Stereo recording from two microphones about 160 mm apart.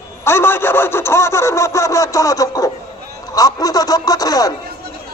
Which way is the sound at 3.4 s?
25° left (ahead or behind).